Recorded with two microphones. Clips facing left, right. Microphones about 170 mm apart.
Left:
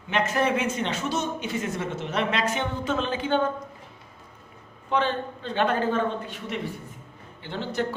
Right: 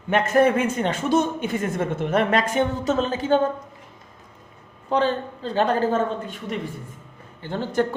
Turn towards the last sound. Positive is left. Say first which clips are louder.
# right 5 dB
turn(degrees=-50)  # may be behind; listen again after turning